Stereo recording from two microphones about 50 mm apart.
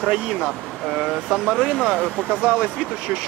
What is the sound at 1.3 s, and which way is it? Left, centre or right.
Speech, centre.